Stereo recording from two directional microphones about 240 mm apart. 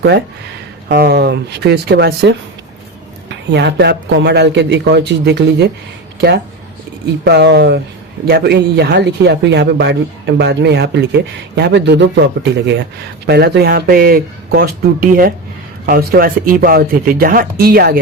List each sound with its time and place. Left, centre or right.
0.9 s speech: right
3.5 s speech: right